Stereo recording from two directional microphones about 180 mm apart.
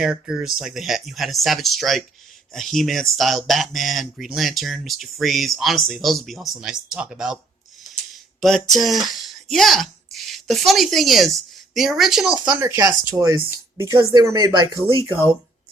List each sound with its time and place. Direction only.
0.0 s speech: 5° right (ahead or behind)
8.4 s speech: centre (ahead or behind)
12.5 s speech: 15° right (ahead or behind)